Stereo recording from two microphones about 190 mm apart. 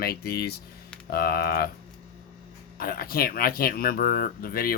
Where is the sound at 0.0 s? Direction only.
55° left (ahead or behind).